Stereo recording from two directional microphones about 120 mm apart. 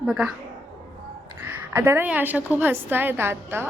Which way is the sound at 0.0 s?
5° right (ahead or behind).